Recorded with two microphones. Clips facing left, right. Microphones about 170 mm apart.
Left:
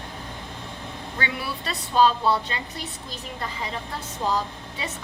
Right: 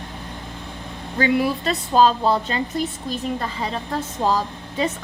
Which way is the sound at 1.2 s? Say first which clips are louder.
Right 12 dB; 40° right (ahead or behind).